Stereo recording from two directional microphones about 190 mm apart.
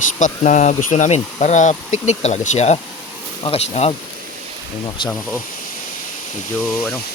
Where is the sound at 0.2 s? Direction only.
40° left (ahead or behind).